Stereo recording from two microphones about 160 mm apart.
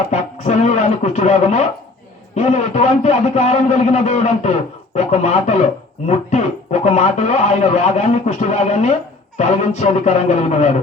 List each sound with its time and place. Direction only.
0.1 s a man's voice: 50° left (ahead or behind)